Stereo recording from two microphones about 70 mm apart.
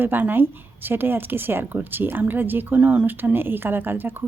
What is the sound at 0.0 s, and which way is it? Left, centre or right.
A woman's voice, right.